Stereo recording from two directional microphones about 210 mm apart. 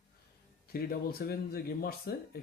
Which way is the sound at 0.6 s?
45° left (ahead or behind).